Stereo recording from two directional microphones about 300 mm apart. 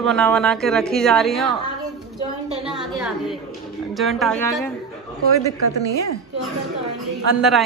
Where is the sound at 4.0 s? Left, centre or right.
Centre.